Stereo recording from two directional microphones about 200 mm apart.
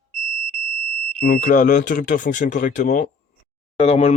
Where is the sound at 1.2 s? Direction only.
45° left (ahead or behind).